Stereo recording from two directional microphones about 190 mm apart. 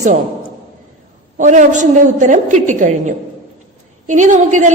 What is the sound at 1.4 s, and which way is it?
A woman's voice, 40° right (ahead or behind).